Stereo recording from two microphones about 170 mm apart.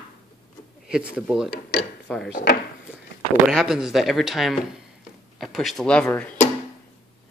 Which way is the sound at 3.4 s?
5° right (ahead or behind).